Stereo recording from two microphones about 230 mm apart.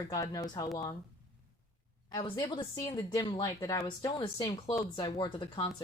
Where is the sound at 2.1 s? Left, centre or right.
Left.